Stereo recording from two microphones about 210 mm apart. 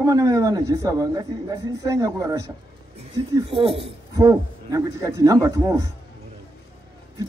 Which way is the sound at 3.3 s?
25° right (ahead or behind).